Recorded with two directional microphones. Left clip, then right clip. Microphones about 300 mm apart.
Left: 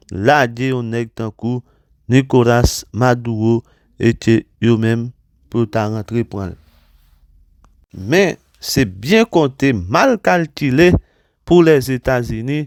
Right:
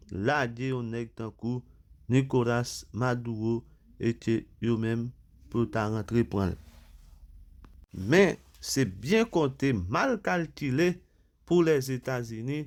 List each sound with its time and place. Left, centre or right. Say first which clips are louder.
0.0 s speech: left 15 dB; left; by 6.8 s centre
7.9 s speech: left 9 dB; left